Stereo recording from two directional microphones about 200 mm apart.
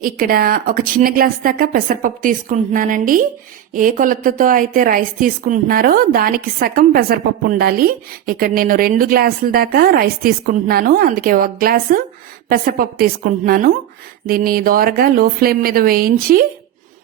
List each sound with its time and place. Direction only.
0.0 s a woman's voice: 45° right (ahead or behind)